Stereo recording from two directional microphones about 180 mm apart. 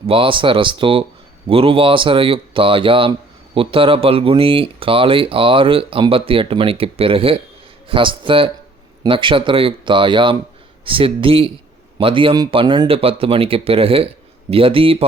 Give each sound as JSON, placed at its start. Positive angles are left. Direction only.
{"t": 0.1, "sound": "speech", "side_deg": -30}